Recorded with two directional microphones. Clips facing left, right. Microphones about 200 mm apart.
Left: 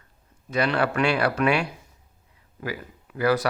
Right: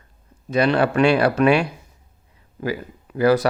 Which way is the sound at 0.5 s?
25° right (ahead or behind).